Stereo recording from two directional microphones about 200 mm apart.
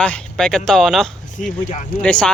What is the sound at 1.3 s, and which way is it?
Speech, 40° left (ahead or behind).